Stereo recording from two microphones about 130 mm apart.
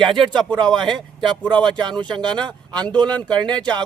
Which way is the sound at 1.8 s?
35° right (ahead or behind).